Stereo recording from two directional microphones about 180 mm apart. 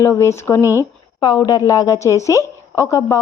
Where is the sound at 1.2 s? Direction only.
25° left (ahead or behind).